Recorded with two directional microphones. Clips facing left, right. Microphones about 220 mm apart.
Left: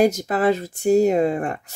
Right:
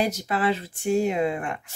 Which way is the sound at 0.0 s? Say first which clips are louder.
Left 7 dB; 45° left (ahead or behind).